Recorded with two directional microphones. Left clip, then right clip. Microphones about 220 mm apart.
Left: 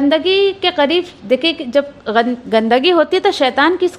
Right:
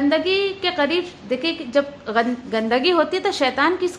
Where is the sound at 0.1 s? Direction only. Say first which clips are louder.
Left 6 dB; 35° left (ahead or behind).